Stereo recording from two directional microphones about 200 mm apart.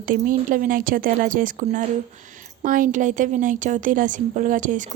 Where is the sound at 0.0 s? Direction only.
45° right (ahead or behind).